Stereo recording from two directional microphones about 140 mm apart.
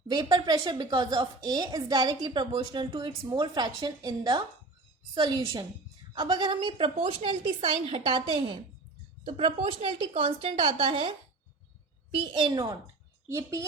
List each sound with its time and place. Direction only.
0.1 s a woman's voice: 30° right (ahead or behind)
12.2 s a woman's voice: 35° right (ahead or behind)
13.2 s a woman's voice: 20° right (ahead or behind)